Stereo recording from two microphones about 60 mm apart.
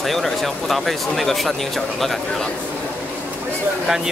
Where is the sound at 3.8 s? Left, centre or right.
Centre.